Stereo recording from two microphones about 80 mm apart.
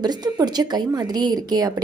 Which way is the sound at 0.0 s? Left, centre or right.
Right.